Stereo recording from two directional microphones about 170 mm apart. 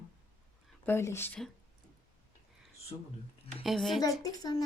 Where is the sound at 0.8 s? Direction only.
15° left (ahead or behind).